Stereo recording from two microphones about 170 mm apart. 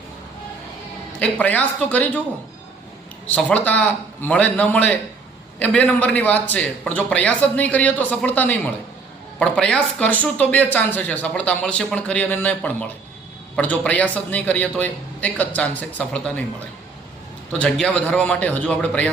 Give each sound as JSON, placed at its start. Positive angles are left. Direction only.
{"t": 1.2, "sound": "speech", "side_deg": 10}
{"t": 3.2, "sound": "speech", "side_deg": 10}
{"t": 17.6, "sound": "speech", "side_deg": 5}